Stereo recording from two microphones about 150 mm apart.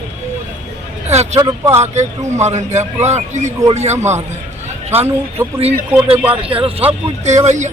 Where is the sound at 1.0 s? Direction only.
45° right (ahead or behind).